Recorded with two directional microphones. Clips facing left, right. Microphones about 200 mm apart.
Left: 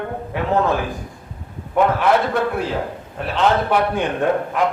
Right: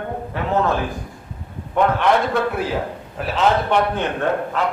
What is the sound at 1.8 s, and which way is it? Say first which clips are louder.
Speech: left 1 dB; 5° left (ahead or behind).